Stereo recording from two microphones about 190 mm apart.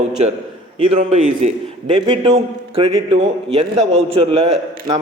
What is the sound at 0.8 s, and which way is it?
A man's voice, 35° right (ahead or behind).